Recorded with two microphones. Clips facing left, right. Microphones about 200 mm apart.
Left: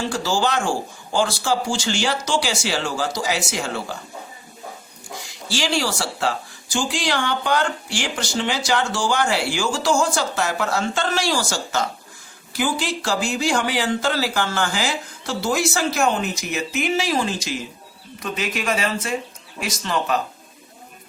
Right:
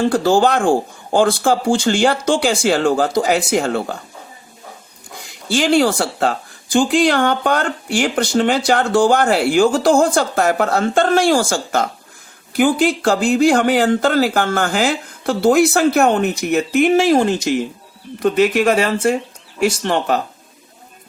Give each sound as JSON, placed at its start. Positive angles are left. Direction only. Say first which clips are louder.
{"t": 0.0, "sound": "speech", "louder": "right 8 dB", "side_deg": -55}
{"t": 5.1, "sound": "speech", "louder": "right 8 dB", "side_deg": -60}